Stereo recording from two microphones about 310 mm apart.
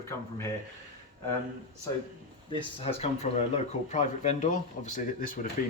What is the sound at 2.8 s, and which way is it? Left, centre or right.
Speech, centre.